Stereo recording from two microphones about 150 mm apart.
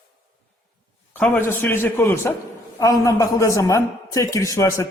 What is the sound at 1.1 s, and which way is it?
A man's voice, 10° left (ahead or behind).